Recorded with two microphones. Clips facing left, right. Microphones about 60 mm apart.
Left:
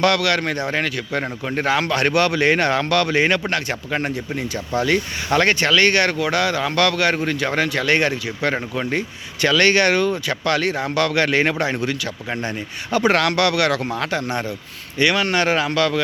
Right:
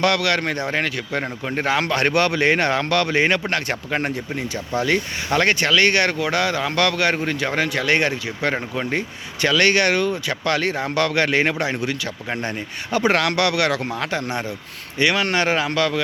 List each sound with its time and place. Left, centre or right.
0.0 s speech: right
5.3 s speech: centre
9.6 s speech: centre
10.4 s speech: right